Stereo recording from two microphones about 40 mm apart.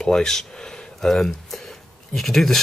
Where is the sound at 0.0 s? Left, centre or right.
Centre.